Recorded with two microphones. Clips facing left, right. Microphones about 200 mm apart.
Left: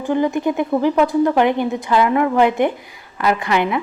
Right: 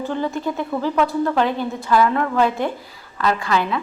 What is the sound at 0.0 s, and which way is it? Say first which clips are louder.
A woman's voice: left 5 dB; 15° left (ahead or behind).